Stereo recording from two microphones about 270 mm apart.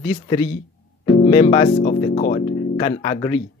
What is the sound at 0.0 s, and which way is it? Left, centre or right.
Speech, centre.